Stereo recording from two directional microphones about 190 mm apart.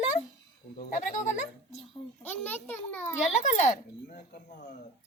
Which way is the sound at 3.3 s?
40° left (ahead or behind).